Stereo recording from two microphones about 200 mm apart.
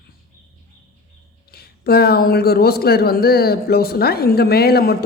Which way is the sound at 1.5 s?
50° left (ahead or behind).